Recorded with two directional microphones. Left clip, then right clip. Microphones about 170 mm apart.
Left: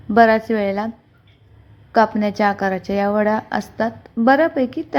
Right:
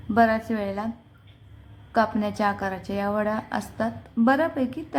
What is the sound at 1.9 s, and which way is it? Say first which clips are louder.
A woman's voice: left 7 dB; 25° left (ahead or behind).